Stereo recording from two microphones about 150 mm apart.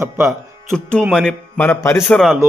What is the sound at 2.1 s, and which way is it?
Speech, centre (ahead or behind).